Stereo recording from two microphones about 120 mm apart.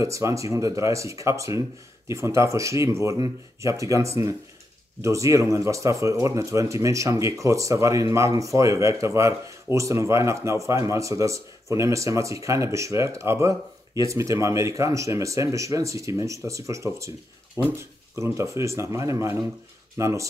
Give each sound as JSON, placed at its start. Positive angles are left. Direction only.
{"t": 0.0, "sound": "speech", "side_deg": -25}
{"t": 18.1, "sound": "speech", "side_deg": -25}